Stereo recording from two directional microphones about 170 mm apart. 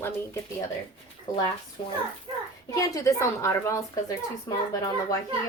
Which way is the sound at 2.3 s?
30° right (ahead or behind).